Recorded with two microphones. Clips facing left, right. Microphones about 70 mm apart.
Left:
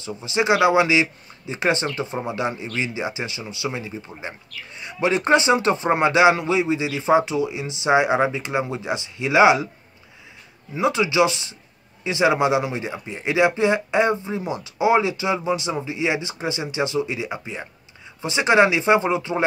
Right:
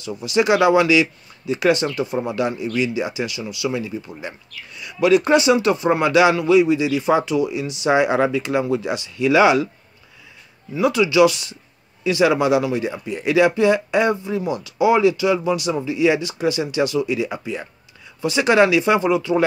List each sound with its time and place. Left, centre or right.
0.2 s speech: left
10.7 s speech: left